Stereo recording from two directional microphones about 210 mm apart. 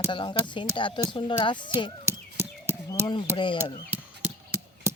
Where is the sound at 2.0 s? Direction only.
10° right (ahead or behind).